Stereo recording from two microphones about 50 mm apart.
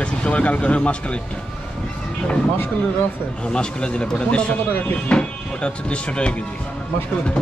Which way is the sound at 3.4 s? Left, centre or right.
Centre.